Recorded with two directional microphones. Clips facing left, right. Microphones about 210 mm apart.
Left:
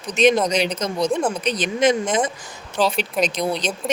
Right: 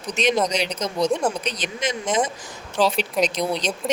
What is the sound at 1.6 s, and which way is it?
Speech, 55° left (ahead or behind).